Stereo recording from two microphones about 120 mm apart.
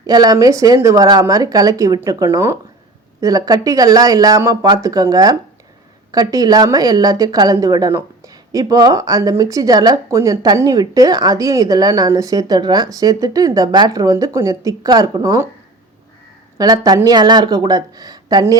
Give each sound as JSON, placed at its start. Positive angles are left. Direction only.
{"t": 0.0, "sound": "a woman's voice", "side_deg": -35}
{"t": 16.6, "sound": "a woman's voice", "side_deg": -30}